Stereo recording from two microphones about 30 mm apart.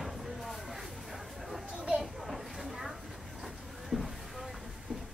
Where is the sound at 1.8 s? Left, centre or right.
Right.